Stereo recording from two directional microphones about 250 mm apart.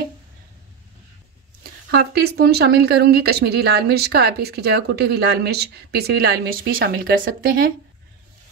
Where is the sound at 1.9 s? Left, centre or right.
Right.